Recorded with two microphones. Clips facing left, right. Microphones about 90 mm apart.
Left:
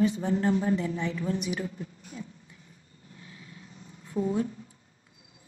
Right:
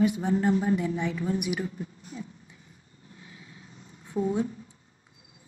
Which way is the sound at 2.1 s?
15° right (ahead or behind).